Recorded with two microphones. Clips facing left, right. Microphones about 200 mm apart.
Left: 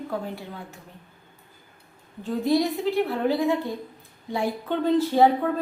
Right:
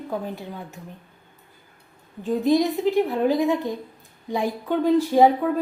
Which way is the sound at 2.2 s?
15° right (ahead or behind).